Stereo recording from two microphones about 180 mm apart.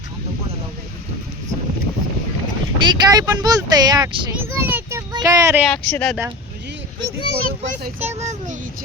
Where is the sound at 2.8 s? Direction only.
25° right (ahead or behind).